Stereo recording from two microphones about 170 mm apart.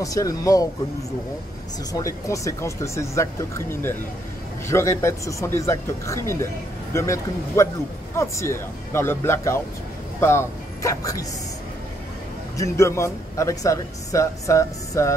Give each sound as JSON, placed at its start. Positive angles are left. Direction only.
{"t": 0.0, "sound": "speech", "side_deg": 20}
{"t": 1.9, "sound": "speech", "side_deg": 20}
{"t": 12.5, "sound": "speech", "side_deg": 15}